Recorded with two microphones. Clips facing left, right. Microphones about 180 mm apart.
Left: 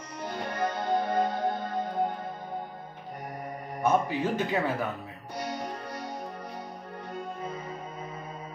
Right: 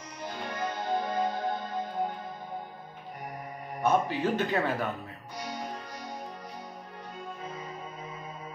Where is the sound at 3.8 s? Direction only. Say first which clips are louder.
Even; 10° left (ahead or behind).